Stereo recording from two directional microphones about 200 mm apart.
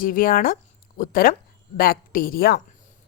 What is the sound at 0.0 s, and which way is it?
Speech, 45° left (ahead or behind).